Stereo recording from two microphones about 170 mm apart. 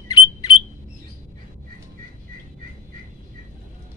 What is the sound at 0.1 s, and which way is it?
Alarm, 25° left (ahead or behind).